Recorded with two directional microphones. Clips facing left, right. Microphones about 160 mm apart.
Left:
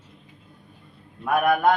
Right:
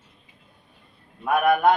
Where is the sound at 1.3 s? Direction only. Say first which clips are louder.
Right 1 dB; centre (ahead or behind).